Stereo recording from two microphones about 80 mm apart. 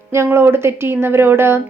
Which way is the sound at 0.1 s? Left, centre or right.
Right.